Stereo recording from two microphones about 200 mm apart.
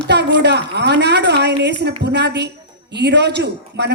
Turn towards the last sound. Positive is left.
turn(degrees=-60)  # may be behind; listen again after turning